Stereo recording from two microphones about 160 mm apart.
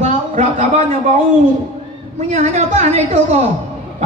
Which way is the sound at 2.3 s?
45° right (ahead or behind).